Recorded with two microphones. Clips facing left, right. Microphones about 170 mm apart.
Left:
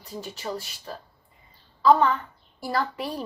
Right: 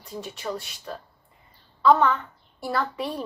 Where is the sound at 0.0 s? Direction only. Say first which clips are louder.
Right 1 dB; centre (ahead or behind).